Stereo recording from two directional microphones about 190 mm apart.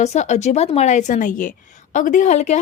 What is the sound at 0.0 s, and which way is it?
A woman's voice, 35° left (ahead or behind).